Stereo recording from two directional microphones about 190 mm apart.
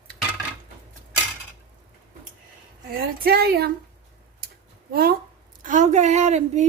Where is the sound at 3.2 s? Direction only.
55° right (ahead or behind).